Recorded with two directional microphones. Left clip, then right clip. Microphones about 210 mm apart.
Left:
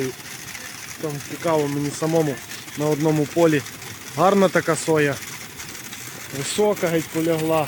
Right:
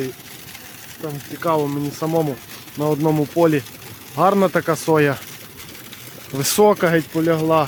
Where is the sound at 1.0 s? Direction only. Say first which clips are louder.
Right 1 dB; 5° right (ahead or behind).